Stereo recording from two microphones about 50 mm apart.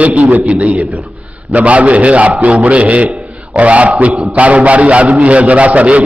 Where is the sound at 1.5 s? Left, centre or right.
Right.